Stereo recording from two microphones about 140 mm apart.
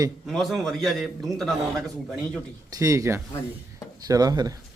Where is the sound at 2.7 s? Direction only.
25° right (ahead or behind).